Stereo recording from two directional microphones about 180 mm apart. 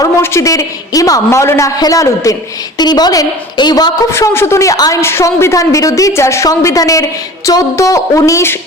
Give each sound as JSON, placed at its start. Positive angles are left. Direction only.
{"t": 0.0, "sound": "a woman's voice", "side_deg": 15}